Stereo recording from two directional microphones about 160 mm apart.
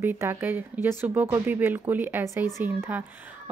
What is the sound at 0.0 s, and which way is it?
Speech, 15° right (ahead or behind).